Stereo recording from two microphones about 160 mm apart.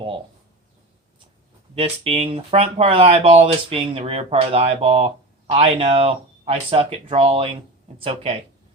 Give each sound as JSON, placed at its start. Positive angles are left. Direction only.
{"t": 1.7, "sound": "speech", "side_deg": -40}